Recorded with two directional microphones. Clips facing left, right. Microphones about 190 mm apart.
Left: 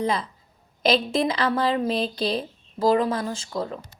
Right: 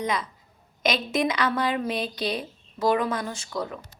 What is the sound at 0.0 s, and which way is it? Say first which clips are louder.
A woman's voice: left 3 dB; 30° left (ahead or behind).